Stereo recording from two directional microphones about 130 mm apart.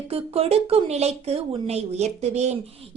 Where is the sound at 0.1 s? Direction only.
50° right (ahead or behind).